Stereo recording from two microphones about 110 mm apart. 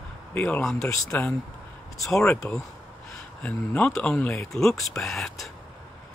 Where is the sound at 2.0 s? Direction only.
5° left (ahead or behind).